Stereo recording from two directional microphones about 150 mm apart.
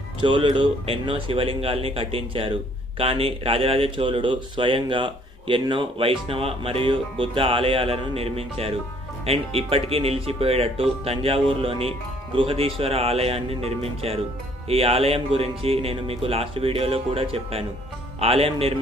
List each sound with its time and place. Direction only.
0.2 s speech: 35° right (ahead or behind)